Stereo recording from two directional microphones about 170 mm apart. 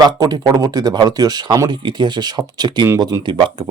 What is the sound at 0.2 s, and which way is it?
Speech, 20° right (ahead or behind).